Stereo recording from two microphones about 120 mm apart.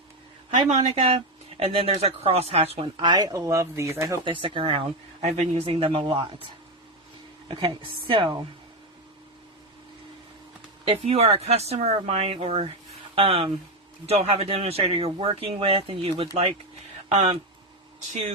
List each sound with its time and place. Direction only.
0.7 s speech: 65° right (ahead or behind)
2.7 s speech: 45° right (ahead or behind); by 4.2 s 25° right (ahead or behind)
4.2 s speech: 45° right (ahead or behind)
5.2 s speech: 65° right (ahead or behind); by 8.4 s 40° right (ahead or behind)
10.8 s speech: 55° right (ahead or behind)
17.1 s speech: 60° right (ahead or behind)